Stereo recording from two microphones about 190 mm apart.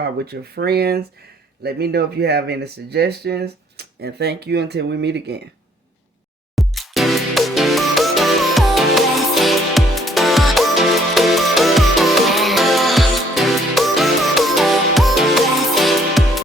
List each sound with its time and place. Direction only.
0.3 s speech: 55° right (ahead or behind)
6.6 s music: centre (ahead or behind)